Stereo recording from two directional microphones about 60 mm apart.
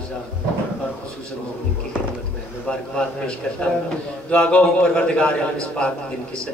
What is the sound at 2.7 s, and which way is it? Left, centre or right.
A man's voice, centre.